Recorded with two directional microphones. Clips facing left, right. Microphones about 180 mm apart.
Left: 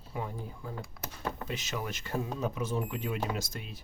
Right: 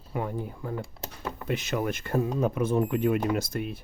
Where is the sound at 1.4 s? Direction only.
60° right (ahead or behind).